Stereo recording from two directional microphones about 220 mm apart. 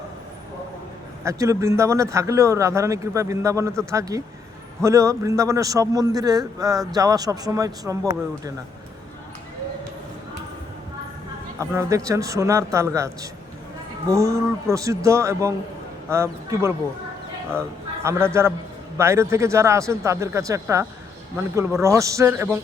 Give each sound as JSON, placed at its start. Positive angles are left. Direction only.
{"t": 1.2, "sound": "a man's voice", "side_deg": -15}
{"t": 11.7, "sound": "a man's voice", "side_deg": -15}
{"t": 14.1, "sound": "a man's voice", "side_deg": -15}
{"t": 18.0, "sound": "a man's voice", "side_deg": -10}